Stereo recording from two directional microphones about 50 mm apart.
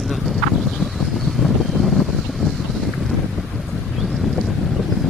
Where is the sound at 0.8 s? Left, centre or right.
Centre.